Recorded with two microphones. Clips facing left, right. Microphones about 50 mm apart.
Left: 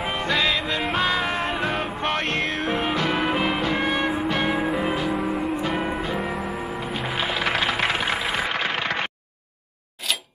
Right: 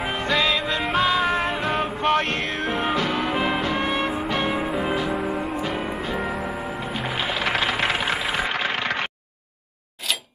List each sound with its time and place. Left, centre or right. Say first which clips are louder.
0.0 s music: right 1 dB; centre
3.1 s music: left 1 dB; centre
3.3 s music: even; centre
6.1 s music: even; centre